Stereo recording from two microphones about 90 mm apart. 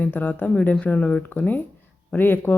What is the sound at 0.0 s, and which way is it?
Speech, 20° left (ahead or behind).